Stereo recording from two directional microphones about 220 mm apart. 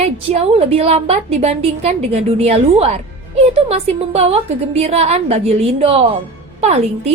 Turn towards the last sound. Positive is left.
turn(degrees=-30)  # may be behind; listen again after turning